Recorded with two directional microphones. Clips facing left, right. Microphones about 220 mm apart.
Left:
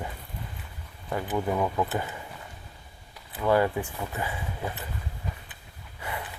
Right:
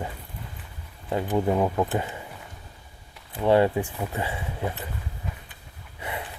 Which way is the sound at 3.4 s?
25° right (ahead or behind).